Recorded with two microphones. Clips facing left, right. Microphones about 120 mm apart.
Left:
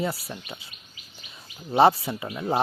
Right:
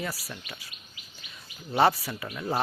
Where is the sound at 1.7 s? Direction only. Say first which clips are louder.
Left 5 dB; 25° left (ahead or behind).